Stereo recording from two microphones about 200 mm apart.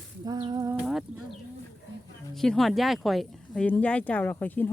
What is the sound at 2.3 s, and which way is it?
Speech, centre (ahead or behind).